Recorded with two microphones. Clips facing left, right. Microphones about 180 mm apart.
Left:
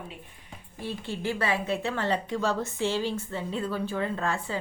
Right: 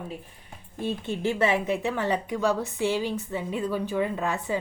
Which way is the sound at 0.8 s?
20° right (ahead or behind).